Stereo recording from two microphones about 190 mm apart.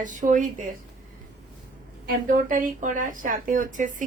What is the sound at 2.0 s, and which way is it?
Speech, 45° right (ahead or behind).